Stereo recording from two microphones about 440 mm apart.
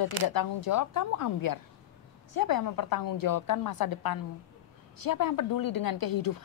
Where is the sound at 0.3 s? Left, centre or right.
Left.